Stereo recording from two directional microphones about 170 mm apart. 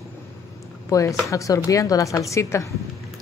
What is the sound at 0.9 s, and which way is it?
Speech, 20° left (ahead or behind).